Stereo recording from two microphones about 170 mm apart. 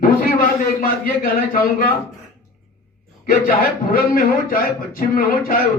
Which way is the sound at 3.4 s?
60° left (ahead or behind).